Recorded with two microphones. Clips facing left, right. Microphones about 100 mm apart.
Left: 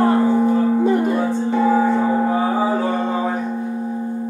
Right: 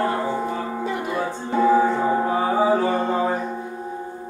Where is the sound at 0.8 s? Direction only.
45° left (ahead or behind).